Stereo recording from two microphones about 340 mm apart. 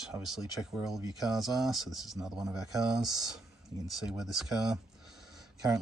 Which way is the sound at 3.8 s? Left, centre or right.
Centre.